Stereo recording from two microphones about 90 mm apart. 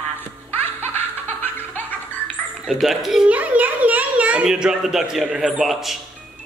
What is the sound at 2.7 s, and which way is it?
Speech, 5° right (ahead or behind).